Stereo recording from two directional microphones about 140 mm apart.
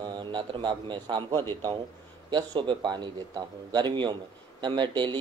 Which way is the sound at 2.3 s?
35° right (ahead or behind).